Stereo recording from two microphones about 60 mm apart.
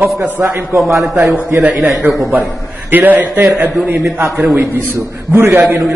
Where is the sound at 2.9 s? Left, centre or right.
Right.